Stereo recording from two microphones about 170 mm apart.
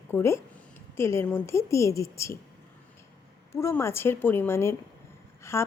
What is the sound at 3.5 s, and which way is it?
A woman's voice, 15° left (ahead or behind).